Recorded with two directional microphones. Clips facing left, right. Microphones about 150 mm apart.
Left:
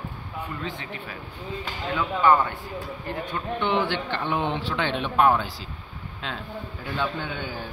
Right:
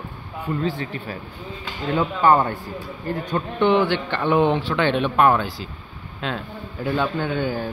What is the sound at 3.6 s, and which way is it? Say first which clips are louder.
Speech: right 7 dB; 60° right (ahead or behind).